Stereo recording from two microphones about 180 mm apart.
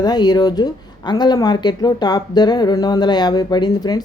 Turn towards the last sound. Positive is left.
turn(degrees=25)  # may be behind; listen again after turning